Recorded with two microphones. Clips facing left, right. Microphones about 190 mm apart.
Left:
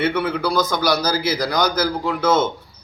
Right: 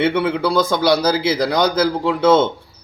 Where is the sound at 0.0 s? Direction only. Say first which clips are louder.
Right 3 dB; 30° right (ahead or behind).